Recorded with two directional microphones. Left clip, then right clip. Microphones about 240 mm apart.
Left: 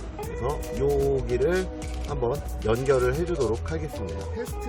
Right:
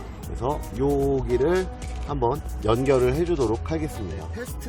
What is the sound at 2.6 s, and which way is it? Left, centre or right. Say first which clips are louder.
Speech: right 2 dB; right.